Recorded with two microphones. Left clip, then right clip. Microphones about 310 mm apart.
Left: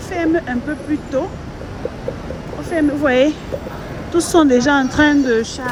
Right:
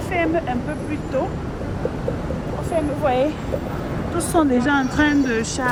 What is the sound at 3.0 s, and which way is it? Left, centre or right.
Speech, left.